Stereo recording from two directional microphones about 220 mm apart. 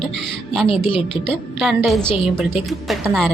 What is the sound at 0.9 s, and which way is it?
Speech, 25° left (ahead or behind).